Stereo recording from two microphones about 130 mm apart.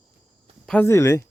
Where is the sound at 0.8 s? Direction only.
20° left (ahead or behind).